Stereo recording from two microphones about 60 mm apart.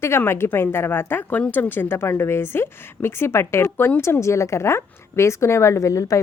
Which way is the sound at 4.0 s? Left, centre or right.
Left.